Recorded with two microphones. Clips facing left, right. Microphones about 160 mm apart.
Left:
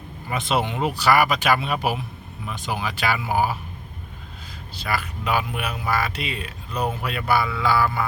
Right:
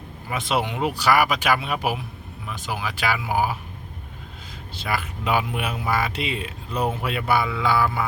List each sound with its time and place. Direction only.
0.3 s speech: 10° right (ahead or behind)
4.8 s speech: 20° right (ahead or behind)